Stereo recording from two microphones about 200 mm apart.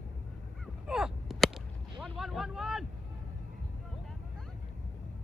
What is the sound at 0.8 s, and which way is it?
Whip, 5° right (ahead or behind).